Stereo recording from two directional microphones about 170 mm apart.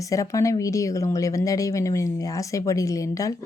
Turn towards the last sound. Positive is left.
turn(degrees=20)  # may be behind; listen again after turning